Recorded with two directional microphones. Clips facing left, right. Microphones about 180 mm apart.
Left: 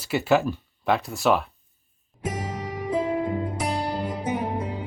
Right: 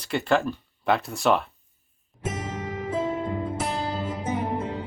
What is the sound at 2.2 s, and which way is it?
Music, 10° left (ahead or behind).